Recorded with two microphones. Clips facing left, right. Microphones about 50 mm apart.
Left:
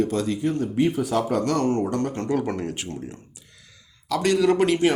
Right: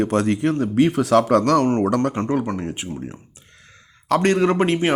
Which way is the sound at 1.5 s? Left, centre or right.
Right.